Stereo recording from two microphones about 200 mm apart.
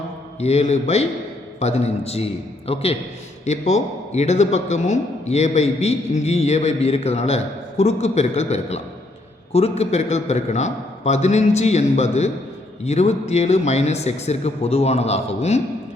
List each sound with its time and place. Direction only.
0.3 s a man's voice: 30° left (ahead or behind)